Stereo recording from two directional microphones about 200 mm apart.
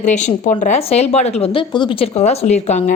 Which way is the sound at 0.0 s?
35° left (ahead or behind).